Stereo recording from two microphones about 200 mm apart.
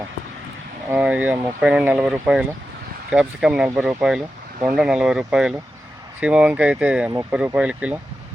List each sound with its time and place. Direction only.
0.9 s speech: 5° right (ahead or behind)